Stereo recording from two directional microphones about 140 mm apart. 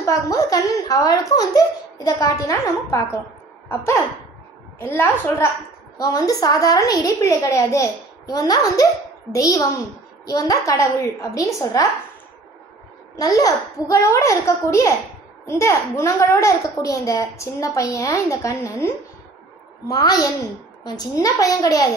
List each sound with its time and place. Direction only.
0.0 s a woman's voice: 25° left (ahead or behind)
5.9 s a child's voice: 25° left (ahead or behind)
13.1 s a child's voice: 25° left (ahead or behind)
19.9 s a child's voice: 25° left (ahead or behind)